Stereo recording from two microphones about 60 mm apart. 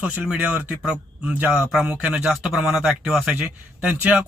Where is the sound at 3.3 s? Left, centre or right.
Centre.